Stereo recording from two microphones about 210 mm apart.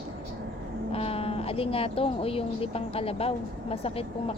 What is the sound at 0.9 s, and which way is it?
Speech, 25° left (ahead or behind).